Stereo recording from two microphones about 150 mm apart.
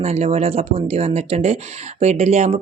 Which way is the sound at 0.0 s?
45° right (ahead or behind).